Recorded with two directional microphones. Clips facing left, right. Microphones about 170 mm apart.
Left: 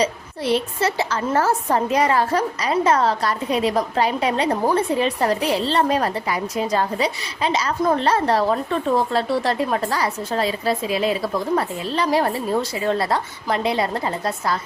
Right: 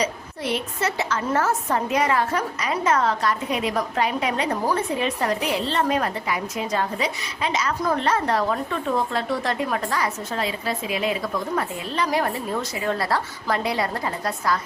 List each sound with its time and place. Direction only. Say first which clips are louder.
0.0 s a woman's voice: left 4 dB; 30° left (ahead or behind)